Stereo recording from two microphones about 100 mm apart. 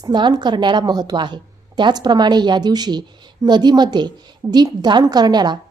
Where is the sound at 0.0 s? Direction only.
50° right (ahead or behind).